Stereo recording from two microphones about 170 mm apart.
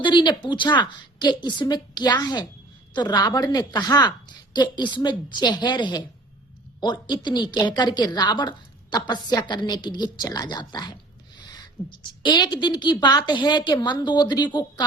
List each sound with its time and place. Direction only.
0.0 s speech: 30° left (ahead or behind)